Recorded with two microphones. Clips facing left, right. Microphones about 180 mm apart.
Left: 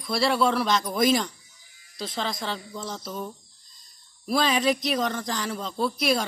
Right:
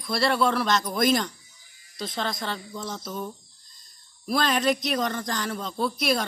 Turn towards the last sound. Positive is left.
turn(degrees=0)  # may be behind; listen again after turning